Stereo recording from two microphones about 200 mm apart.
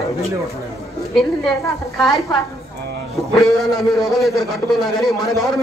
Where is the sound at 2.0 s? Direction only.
Centre (ahead or behind).